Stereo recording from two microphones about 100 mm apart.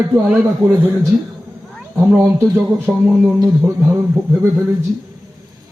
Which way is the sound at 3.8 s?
15° right (ahead or behind).